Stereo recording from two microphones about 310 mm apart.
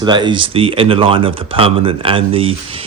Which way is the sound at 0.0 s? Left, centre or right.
Centre.